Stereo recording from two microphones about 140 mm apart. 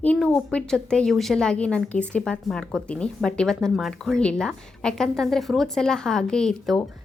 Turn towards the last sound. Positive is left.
turn(degrees=5)  # may be behind; listen again after turning